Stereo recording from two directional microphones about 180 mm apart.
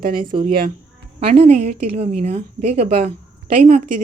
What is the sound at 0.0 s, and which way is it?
Speech, 55° right (ahead or behind).